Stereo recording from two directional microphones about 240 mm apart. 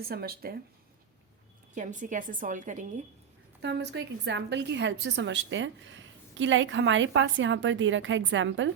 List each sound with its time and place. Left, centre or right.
0.0 s a woman's voice: right
1.7 s a woman's voice: right
3.6 s a woman's voice: right